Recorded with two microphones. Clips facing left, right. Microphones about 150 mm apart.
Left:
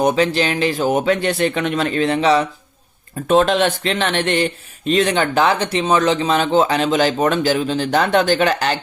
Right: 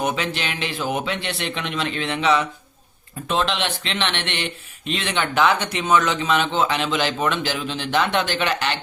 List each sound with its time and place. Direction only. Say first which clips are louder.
0.0 s speech: left 8 dB; 35° left (ahead or behind)
3.2 s speech: left 9 dB; 45° left (ahead or behind)